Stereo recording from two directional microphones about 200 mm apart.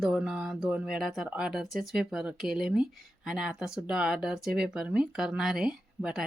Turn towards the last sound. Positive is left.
turn(degrees=-5)  # may be behind; listen again after turning